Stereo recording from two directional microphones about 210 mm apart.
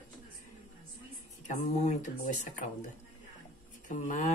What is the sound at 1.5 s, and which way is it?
Speech, 35° left (ahead or behind).